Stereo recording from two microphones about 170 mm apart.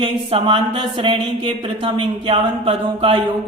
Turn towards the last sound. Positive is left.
turn(degrees=-35)  # may be behind; listen again after turning